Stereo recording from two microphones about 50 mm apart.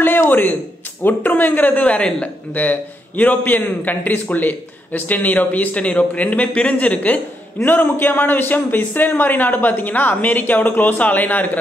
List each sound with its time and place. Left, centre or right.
0.0 s a sound: left
1.0 s a man's voice: left
2.5 s a man's voice: left
7.6 s a man's voice: left